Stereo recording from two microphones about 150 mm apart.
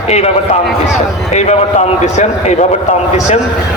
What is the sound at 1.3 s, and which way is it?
A man's voice, 50° left (ahead or behind).